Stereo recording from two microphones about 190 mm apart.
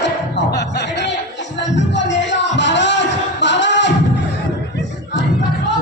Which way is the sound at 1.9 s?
70° left (ahead or behind).